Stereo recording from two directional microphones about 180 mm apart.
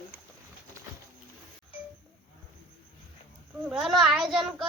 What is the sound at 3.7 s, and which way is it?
Speech, centre (ahead or behind).